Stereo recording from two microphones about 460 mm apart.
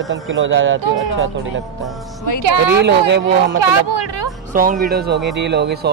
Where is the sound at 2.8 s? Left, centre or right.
Right.